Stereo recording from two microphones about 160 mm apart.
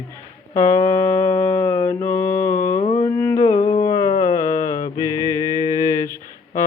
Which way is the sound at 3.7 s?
30° left (ahead or behind).